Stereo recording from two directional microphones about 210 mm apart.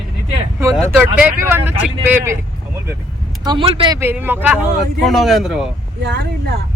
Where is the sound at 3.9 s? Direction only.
10° right (ahead or behind).